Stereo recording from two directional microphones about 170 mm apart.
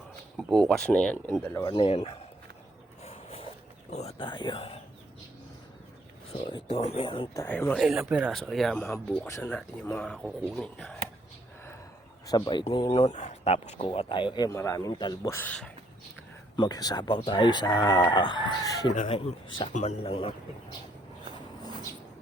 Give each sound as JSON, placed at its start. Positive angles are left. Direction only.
{"t": 0.3, "sound": "speech", "side_deg": 0}
{"t": 1.6, "sound": "speech", "side_deg": 30}
{"t": 3.0, "sound": "a sound", "side_deg": 35}
{"t": 3.9, "sound": "speech", "side_deg": 35}
{"t": 6.5, "sound": "speech", "side_deg": 35}
{"t": 7.3, "sound": "speech", "side_deg": 15}
{"t": 7.8, "sound": "speech", "side_deg": -5}
{"t": 8.9, "sound": "speech", "side_deg": 15}
{"t": 12.2, "sound": "speech", "side_deg": 25}
{"t": 15.4, "sound": "speech", "side_deg": 5}
{"t": 16.6, "sound": "speech", "side_deg": 25}
{"t": 18.9, "sound": "speech", "side_deg": 35}